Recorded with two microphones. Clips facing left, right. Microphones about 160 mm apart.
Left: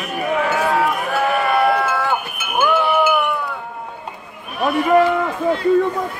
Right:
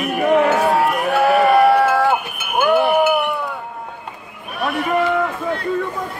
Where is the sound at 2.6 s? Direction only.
55° right (ahead or behind).